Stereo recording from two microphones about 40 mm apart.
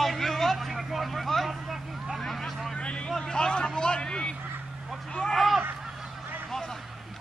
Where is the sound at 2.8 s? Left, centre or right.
Left.